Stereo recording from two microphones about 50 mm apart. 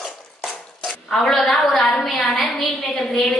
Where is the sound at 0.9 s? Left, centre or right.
Centre.